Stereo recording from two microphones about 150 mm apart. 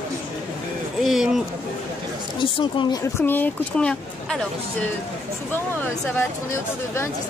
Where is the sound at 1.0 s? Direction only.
Centre (ahead or behind).